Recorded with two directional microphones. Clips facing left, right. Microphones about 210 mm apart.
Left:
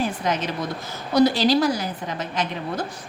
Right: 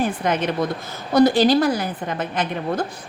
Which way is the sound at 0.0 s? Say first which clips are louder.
Right 3 dB; 55° right (ahead or behind).